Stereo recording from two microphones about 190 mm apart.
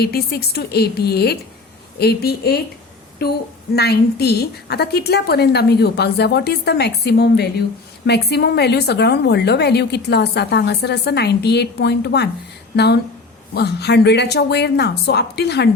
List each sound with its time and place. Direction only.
0.0 s a woman's voice: 55° left (ahead or behind)